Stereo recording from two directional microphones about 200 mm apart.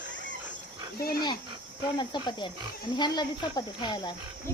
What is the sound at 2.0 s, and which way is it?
Speech, 20° left (ahead or behind).